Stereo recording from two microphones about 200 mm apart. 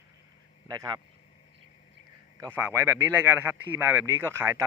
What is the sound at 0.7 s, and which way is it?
Speech, 20° right (ahead or behind).